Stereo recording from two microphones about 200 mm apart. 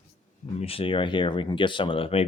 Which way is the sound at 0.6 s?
30° left (ahead or behind).